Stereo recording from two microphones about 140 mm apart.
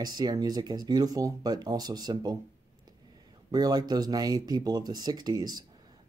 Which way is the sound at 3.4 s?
30° right (ahead or behind).